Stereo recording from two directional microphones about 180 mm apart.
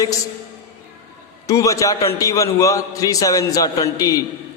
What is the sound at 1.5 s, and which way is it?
A man's voice, 15° left (ahead or behind).